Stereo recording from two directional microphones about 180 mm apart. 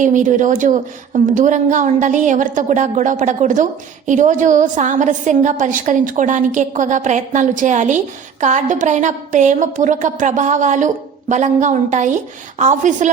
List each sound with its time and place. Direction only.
0.0 s a woman's voice: 45° right (ahead or behind)